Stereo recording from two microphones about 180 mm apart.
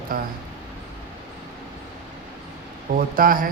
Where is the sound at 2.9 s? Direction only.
50° right (ahead or behind).